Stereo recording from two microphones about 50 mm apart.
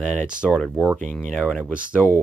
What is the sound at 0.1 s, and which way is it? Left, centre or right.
Speech, centre.